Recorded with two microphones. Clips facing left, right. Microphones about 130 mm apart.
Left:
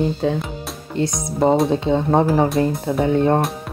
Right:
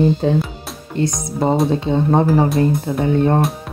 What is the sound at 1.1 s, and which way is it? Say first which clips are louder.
Speech: left 5 dB; centre (ahead or behind).